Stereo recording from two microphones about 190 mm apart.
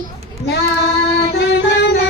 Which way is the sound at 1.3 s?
60° left (ahead or behind).